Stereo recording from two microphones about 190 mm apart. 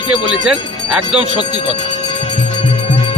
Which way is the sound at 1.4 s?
25° left (ahead or behind).